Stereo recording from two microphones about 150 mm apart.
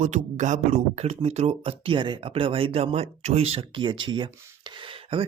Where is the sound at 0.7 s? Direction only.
45° right (ahead or behind).